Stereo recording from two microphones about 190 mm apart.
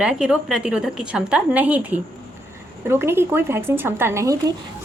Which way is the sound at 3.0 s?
10° right (ahead or behind).